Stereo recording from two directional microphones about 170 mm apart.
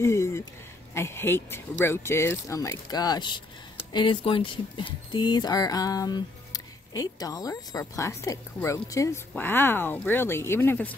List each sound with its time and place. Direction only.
0.0 s speech: 15° left (ahead or behind)